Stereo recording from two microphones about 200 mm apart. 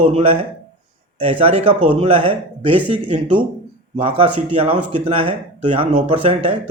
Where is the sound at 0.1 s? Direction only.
30° right (ahead or behind).